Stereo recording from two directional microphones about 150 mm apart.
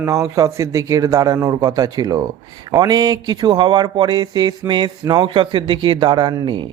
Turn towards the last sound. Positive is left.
turn(degrees=-30)  # may be behind; listen again after turning